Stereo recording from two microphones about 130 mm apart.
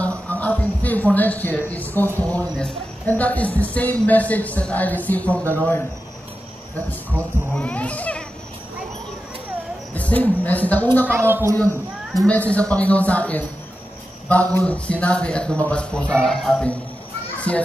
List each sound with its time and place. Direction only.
0.3 s a man's voice: 10° left (ahead or behind)
7.5 s a man's voice: 10° left (ahead or behind)
9.9 s speech: 10° left (ahead or behind)
11.1 s a woman's voice: 15° right (ahead or behind)
12.2 s a man's voice: 10° left (ahead or behind)